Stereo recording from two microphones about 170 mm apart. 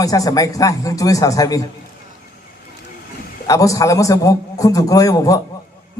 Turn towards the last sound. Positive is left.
turn(degrees=20)  # may be behind; listen again after turning